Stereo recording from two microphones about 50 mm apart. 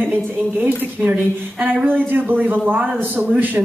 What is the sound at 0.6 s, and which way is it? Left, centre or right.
Speech, right.